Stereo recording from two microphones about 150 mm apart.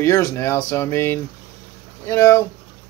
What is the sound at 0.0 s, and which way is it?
Speech, 20° left (ahead or behind).